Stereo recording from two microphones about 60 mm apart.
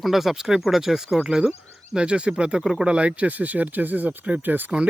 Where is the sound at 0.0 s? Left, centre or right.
Centre; by 4.7 s right.